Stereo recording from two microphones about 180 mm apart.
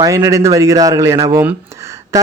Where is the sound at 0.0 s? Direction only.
15° right (ahead or behind).